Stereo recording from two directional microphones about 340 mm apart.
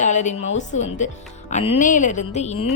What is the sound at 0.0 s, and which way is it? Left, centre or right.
Speech, left.